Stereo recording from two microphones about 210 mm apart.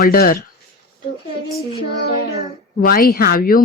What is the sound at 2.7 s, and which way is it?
Child singing, 45° left (ahead or behind).